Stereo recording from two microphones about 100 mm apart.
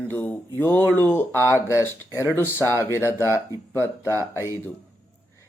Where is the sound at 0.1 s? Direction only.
20° left (ahead or behind).